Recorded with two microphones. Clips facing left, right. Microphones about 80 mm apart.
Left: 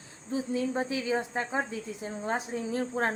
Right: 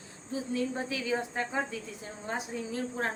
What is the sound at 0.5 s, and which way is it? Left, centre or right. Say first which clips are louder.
A woman's voice: left 2 dB; left.